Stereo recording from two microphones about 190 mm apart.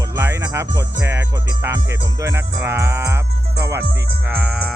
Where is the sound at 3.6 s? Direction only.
15° right (ahead or behind).